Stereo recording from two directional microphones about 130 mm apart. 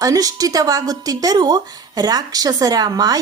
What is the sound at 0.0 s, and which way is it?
A woman's voice, 25° right (ahead or behind).